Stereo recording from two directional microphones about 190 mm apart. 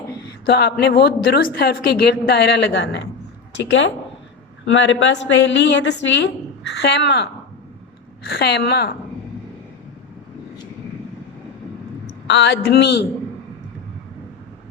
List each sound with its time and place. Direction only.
0.4 s a woman's voice: 60° left (ahead or behind)
4.6 s a woman's voice: 70° left (ahead or behind)
8.3 s a woman's voice: 60° left (ahead or behind)
12.4 s a woman's voice: 60° left (ahead or behind)